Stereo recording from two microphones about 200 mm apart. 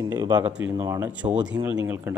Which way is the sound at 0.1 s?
20° right (ahead or behind).